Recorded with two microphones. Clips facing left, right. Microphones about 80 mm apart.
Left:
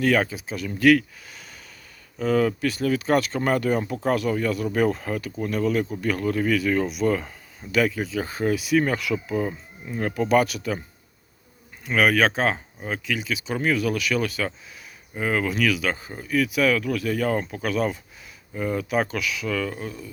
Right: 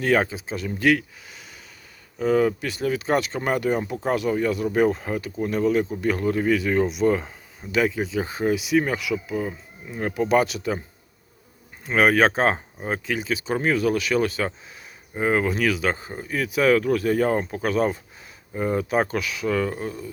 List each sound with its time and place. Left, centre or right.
0.0 s speech: right; by 10.0 s centre
10.0 s speech: centre
11.9 s speech: right